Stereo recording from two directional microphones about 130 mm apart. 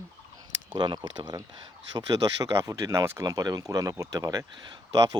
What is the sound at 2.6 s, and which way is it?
Speech, 25° right (ahead or behind).